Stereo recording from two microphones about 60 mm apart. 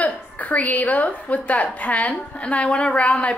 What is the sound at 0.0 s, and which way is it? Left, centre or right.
A woman's voice, left.